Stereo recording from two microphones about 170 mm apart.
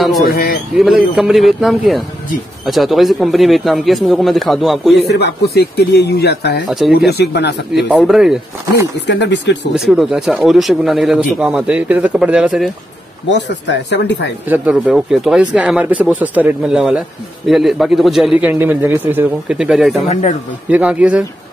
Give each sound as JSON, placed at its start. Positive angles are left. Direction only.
{"t": 0.2, "sound": "a man's voice", "side_deg": 60}
{"t": 0.7, "sound": "a man's voice", "side_deg": 0}
{"t": 5.1, "sound": "speech", "side_deg": 75}
{"t": 7.7, "sound": "a man's voice", "side_deg": 0}
{"t": 9.0, "sound": "speech", "side_deg": 90}
{"t": 9.8, "sound": "a man's voice", "side_deg": 0}
{"t": 13.3, "sound": "speech", "side_deg": 90}
{"t": 14.5, "sound": "a man's voice", "side_deg": -5}
{"t": 20.0, "sound": "speech", "side_deg": 40}
{"t": 20.7, "sound": "speech", "side_deg": -5}